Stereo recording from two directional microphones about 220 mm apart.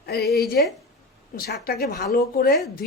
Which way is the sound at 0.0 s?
45° left (ahead or behind).